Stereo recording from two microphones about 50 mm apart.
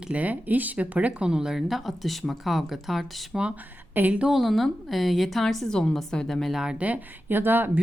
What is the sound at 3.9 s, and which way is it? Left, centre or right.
Speech, right.